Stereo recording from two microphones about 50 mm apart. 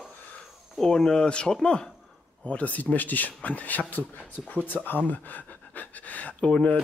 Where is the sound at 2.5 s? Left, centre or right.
Left.